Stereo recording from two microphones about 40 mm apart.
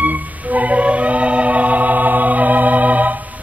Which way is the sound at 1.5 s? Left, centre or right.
Right.